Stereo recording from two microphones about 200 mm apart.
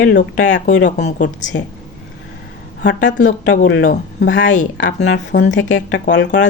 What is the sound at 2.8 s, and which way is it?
Speech, 60° left (ahead or behind).